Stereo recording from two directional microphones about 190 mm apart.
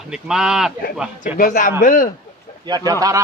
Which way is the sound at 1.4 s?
45° left (ahead or behind).